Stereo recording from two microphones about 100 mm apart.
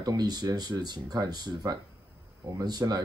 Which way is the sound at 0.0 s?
40° right (ahead or behind).